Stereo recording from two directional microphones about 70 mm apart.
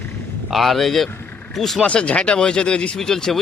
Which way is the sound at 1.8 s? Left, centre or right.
Centre.